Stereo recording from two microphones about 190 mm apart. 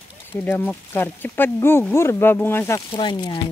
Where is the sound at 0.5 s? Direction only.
10° left (ahead or behind).